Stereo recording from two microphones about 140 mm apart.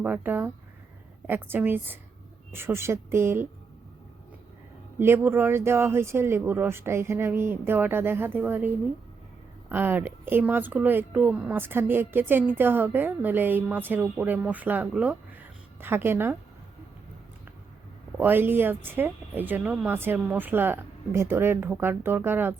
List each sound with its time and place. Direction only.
0.0 s speech: 10° right (ahead or behind)
4.9 s speech: 15° right (ahead or behind)
18.2 s speech: 15° right (ahead or behind)